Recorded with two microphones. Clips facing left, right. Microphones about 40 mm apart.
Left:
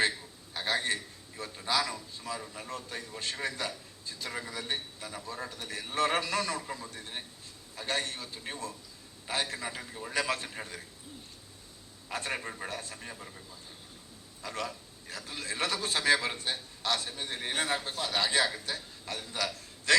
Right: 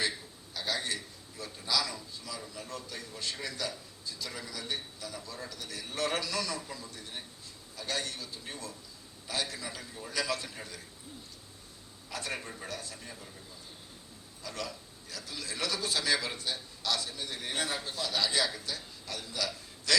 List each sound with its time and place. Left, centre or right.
0.5 s a sound: left
1.4 s a man's voice: left
12.1 s a man's voice: left
14.4 s a man's voice: left